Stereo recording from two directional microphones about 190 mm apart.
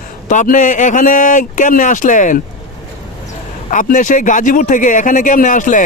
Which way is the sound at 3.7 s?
40° left (ahead or behind).